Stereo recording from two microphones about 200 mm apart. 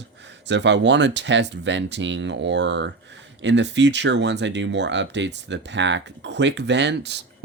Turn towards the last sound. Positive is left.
turn(degrees=-60)  # may be behind; listen again after turning